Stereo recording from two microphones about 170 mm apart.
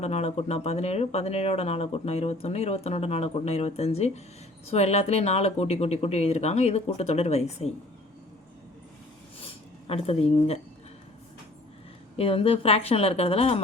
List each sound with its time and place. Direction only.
0.0 s speech: 40° left (ahead or behind)
9.4 s a sound: 35° left (ahead or behind)
12.1 s speech: 35° left (ahead or behind)